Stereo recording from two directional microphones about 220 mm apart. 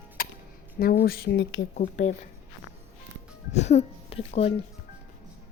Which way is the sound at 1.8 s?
35° left (ahead or behind).